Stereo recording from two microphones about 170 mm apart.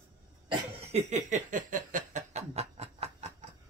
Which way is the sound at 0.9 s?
45° right (ahead or behind).